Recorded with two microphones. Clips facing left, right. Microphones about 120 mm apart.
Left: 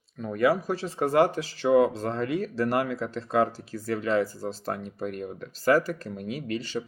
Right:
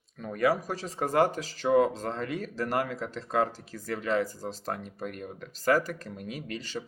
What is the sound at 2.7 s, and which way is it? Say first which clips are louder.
Speech: left 1 dB; 40° right (ahead or behind).